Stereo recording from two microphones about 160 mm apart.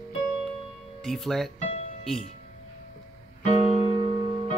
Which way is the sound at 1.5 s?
45° left (ahead or behind).